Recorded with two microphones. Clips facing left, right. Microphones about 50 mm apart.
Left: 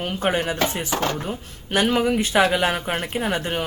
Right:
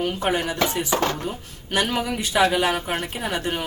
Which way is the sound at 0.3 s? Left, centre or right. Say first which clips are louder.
Even; left.